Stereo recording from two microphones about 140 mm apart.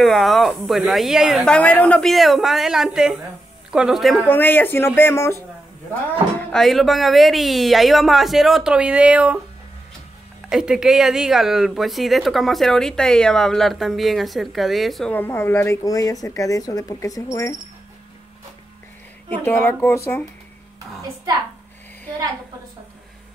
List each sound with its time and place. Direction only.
0.0 s speech: centre (ahead or behind)
4.3 s speech: 15° left (ahead or behind)
6.5 s speech: centre (ahead or behind)
10.5 s speech: 5° right (ahead or behind)
15.1 s speech: 15° left (ahead or behind)
19.4 s speech: 15° left (ahead or behind)